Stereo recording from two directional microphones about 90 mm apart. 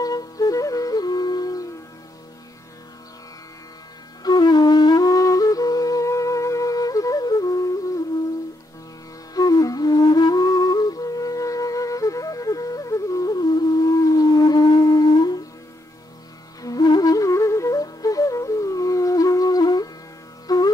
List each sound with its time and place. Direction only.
0.0 s music: 45° left (ahead or behind)
4.2 s flute: 50° left (ahead or behind)
9.3 s music: 45° left (ahead or behind)
16.6 s music: 50° left (ahead or behind)